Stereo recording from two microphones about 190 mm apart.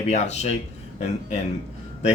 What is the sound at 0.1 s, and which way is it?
Speech, 35° left (ahead or behind).